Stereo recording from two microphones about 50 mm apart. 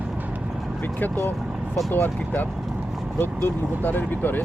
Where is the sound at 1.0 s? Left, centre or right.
Left.